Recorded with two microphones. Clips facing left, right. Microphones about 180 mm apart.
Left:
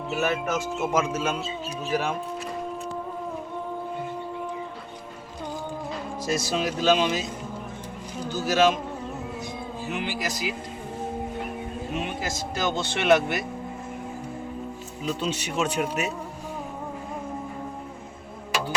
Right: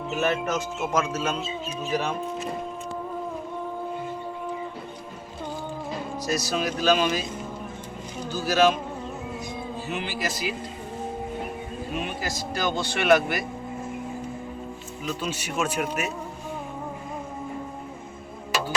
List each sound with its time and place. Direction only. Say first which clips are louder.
0.1 s speech: right 1 dB; 5° left (ahead or behind)
6.3 s a man's voice: left 1 dB; 25° left (ahead or behind)
8.2 s a man's voice: even; 20° left (ahead or behind)
9.8 s speech: left 1 dB; 15° left (ahead or behind)
11.9 s a man's voice: even; 20° left (ahead or behind)
15.2 s a man's voice: left 1 dB; 25° left (ahead or behind)